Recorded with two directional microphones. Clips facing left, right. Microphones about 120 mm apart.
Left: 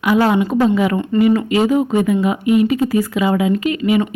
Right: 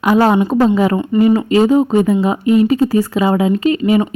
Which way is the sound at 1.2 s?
30° right (ahead or behind).